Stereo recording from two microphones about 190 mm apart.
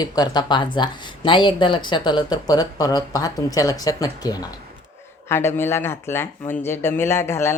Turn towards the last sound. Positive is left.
turn(degrees=15)  # may be behind; listen again after turning